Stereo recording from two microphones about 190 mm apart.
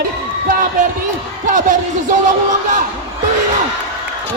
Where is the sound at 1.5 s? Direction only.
40° right (ahead or behind).